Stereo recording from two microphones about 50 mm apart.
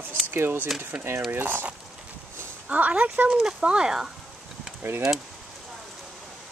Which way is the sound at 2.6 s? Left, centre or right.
Right.